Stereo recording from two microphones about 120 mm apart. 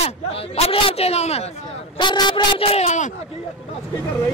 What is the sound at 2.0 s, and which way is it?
Speech, 40° left (ahead or behind).